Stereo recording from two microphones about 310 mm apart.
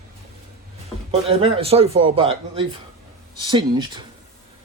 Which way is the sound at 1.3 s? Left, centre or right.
Centre.